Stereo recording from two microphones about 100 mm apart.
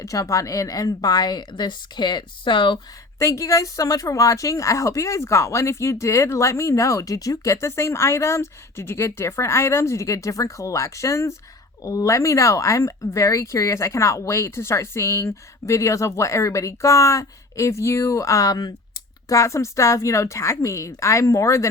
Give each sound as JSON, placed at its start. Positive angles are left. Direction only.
{"t": 0.0, "sound": "speech", "side_deg": 35}
{"t": 3.2, "sound": "speech", "side_deg": 35}